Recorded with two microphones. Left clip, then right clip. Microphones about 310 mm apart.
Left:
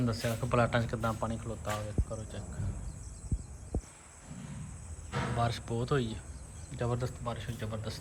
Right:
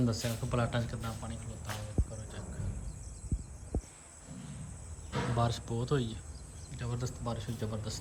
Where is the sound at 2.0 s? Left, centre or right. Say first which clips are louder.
Left 1 dB; left.